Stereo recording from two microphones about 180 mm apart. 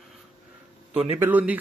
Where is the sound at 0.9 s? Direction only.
30° right (ahead or behind).